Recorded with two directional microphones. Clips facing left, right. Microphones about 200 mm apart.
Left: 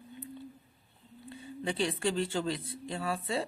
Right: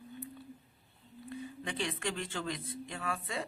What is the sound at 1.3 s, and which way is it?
Speech, 30° left (ahead or behind).